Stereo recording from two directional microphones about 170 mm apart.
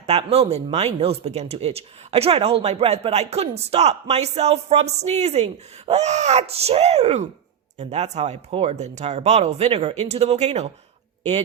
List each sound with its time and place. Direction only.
0.0 s speech: 40° right (ahead or behind)